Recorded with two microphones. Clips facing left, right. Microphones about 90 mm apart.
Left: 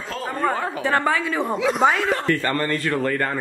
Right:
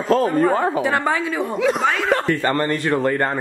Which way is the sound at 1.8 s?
20° left (ahead or behind).